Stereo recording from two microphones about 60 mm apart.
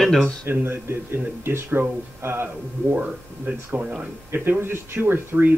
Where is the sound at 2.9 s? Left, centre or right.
Right.